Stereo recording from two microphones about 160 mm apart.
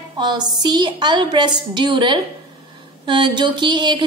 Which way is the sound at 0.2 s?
25° right (ahead or behind).